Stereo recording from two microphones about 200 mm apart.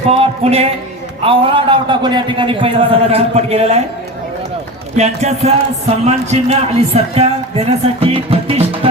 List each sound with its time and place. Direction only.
0.1 s a man's voice: 30° right (ahead or behind)
4.9 s a man's voice: 35° right (ahead or behind)